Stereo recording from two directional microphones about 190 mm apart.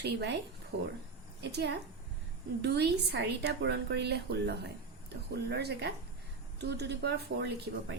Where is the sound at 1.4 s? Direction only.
60° right (ahead or behind).